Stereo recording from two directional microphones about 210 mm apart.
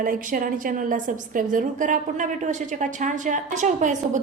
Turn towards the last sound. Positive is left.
turn(degrees=-35)  # may be behind; listen again after turning